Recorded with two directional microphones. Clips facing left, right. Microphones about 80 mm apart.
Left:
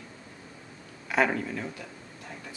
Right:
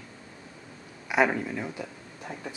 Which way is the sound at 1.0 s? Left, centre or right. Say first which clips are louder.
Right 2 dB; centre.